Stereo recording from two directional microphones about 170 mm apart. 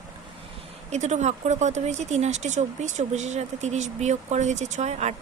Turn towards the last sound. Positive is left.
turn(degrees=-45)  # may be behind; listen again after turning